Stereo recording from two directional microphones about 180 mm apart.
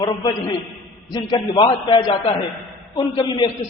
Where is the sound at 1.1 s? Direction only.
25° left (ahead or behind).